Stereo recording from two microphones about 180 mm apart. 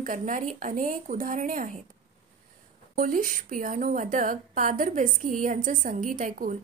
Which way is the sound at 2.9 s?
50° right (ahead or behind).